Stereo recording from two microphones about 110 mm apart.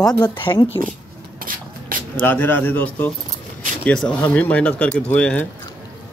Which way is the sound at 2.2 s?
20° left (ahead or behind).